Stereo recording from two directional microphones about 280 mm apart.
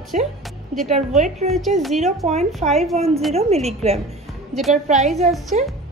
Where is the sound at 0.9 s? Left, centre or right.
Right.